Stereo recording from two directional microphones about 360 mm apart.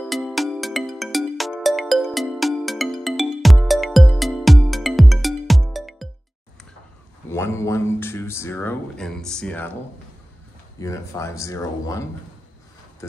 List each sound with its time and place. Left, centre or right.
0.0 s music: centre
7.2 s a sound: centre
10.8 s speech: centre